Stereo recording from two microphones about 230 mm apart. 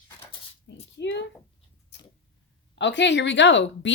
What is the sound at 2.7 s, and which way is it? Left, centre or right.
Speech, left.